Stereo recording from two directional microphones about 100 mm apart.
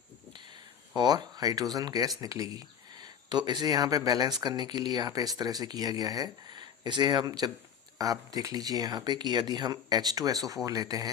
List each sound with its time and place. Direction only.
0.9 s speech: 40° right (ahead or behind)